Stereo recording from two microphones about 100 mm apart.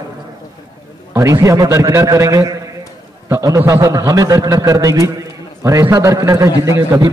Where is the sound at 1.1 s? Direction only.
30° right (ahead or behind).